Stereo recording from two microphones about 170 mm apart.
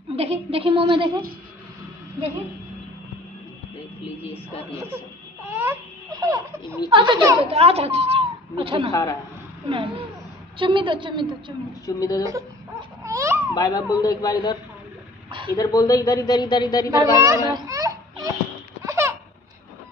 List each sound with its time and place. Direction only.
0.1 s speech: 35° right (ahead or behind)
4.6 s speech: 10° right (ahead or behind)
5.5 s crying: 15° right (ahead or behind)
6.1 s speech: 20° right (ahead or behind)
8.9 s a man's voice: 20° left (ahead or behind)
9.7 s a woman's voice: 30° right (ahead or behind)
11.8 s a man's voice: 20° left (ahead or behind)
12.3 s baby cry: 20° right (ahead or behind)
13.6 s a man's voice: 20° left (ahead or behind)
17.2 s a sound: 20° right (ahead or behind)
18.9 s laughter: 15° right (ahead or behind)